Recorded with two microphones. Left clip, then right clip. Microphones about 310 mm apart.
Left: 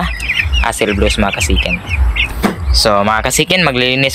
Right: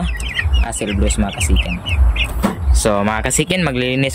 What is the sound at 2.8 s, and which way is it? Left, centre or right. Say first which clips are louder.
Speech: left 6 dB; centre.